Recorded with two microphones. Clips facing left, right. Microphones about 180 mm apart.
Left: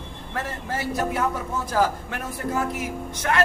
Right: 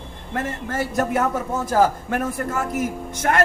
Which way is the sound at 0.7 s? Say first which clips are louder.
Right 3 dB; 50° right (ahead or behind).